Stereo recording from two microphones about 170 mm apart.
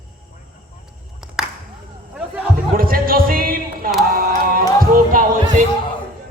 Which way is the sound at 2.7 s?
60° right (ahead or behind).